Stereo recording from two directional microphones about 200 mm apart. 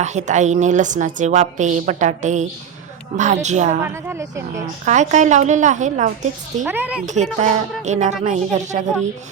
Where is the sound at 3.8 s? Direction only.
10° right (ahead or behind).